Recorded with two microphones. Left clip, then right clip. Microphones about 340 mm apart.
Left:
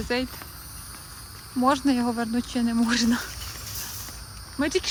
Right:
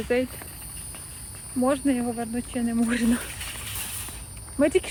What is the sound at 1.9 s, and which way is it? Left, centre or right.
Speech, centre.